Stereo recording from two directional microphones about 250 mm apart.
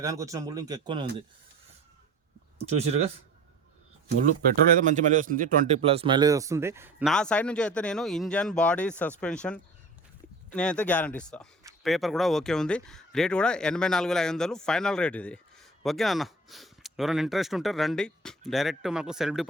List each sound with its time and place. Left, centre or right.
0.0 s speech: centre
4.8 s speech: right; by 7.1 s centre
7.1 s speech: centre